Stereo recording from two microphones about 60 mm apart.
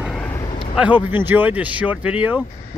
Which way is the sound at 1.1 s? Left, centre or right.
Right.